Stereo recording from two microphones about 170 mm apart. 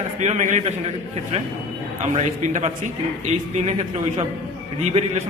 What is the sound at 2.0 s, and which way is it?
Speech, 45° right (ahead or behind).